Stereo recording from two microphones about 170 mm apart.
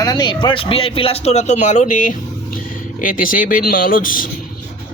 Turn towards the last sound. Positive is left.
turn(degrees=55)  # may be behind; listen again after turning